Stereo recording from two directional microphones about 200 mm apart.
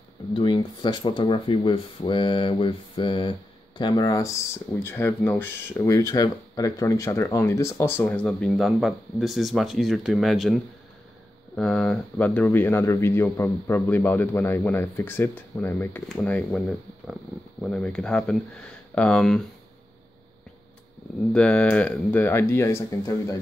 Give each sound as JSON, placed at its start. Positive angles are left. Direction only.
{"t": 0.3, "sound": "speech", "side_deg": 25}
{"t": 21.3, "sound": "speech", "side_deg": 5}